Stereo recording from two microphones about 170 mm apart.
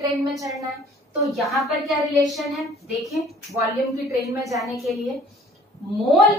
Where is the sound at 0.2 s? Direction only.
20° right (ahead or behind).